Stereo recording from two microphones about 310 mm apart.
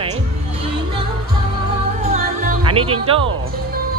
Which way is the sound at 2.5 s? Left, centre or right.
Centre.